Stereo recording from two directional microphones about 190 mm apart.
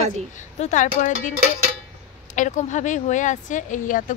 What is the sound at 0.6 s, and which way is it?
Speech, 40° left (ahead or behind).